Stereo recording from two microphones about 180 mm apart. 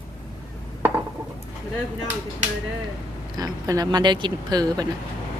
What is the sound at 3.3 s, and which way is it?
Speech, 20° right (ahead or behind).